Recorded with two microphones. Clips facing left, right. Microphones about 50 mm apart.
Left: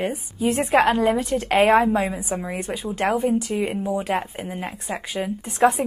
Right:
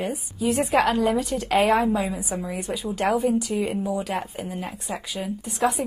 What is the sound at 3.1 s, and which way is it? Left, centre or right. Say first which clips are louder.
Speech: left 1 dB; left.